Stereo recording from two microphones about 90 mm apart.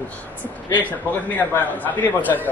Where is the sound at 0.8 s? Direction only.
20° left (ahead or behind).